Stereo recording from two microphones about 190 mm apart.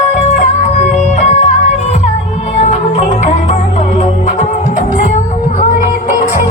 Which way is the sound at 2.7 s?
35° left (ahead or behind).